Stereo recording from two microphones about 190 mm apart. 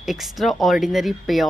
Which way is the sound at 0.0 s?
Centre (ahead or behind).